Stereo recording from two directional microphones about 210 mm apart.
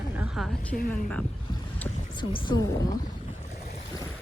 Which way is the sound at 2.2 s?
20° left (ahead or behind).